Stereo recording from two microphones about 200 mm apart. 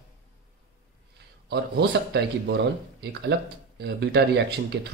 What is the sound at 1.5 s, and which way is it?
Speech, 55° right (ahead or behind).